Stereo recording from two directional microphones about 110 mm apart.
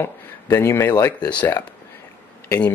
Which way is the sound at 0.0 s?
25° left (ahead or behind).